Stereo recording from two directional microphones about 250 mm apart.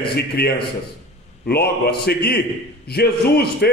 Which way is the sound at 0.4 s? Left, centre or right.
Left.